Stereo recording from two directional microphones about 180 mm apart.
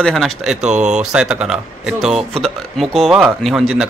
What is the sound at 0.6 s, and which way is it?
Speech, 40° right (ahead or behind).